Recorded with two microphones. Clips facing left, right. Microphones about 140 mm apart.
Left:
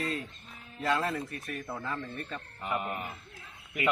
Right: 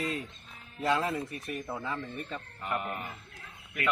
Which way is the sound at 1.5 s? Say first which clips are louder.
Right 1 dB; 10° right (ahead or behind).